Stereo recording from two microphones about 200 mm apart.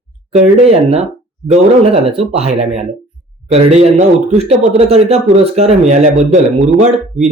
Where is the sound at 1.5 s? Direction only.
30° right (ahead or behind).